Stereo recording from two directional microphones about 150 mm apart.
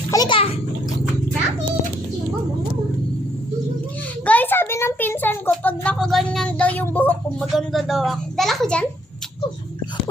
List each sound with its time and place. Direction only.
0.1 s a child's voice: 25° left (ahead or behind)
0.3 s bathtub: 40° left (ahead or behind)
4.3 s a sound: 10° left (ahead or behind)
7.5 s a child's voice: centre (ahead or behind)